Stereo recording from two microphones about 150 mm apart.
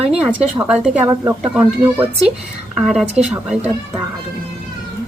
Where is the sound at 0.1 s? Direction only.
10° right (ahead or behind).